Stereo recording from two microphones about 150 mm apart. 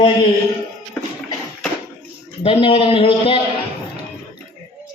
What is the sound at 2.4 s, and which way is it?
Speech, 40° left (ahead or behind).